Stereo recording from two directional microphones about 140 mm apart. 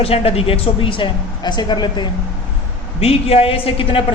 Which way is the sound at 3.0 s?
45° left (ahead or behind).